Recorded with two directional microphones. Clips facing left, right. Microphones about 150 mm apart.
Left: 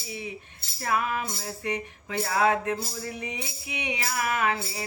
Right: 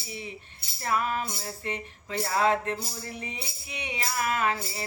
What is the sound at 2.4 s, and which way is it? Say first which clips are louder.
Mantra: left 1 dB; 15° left (ahead or behind).